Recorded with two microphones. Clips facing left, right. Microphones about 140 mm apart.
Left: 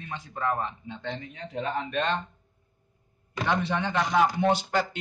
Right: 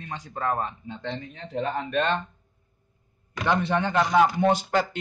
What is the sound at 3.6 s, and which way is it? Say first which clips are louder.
Speech: right 4 dB; 50° right (ahead or behind).